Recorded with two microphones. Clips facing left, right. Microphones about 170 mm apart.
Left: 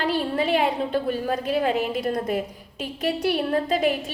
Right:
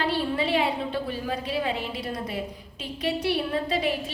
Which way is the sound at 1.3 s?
50° left (ahead or behind).